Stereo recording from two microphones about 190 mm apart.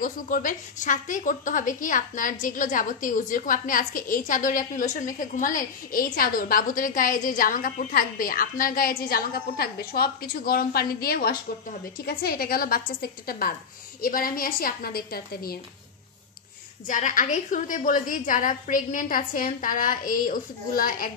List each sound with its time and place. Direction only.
0.0 s a woman's voice: 45° left (ahead or behind)
16.8 s a woman's voice: 40° left (ahead or behind)